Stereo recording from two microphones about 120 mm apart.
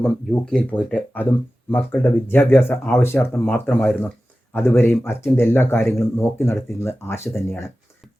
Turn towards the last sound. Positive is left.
turn(degrees=20)  # may be behind; listen again after turning